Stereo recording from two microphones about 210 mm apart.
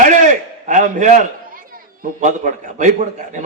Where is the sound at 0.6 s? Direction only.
35° right (ahead or behind).